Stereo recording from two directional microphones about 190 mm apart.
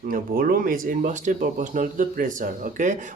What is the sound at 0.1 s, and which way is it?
Speech, 50° right (ahead or behind).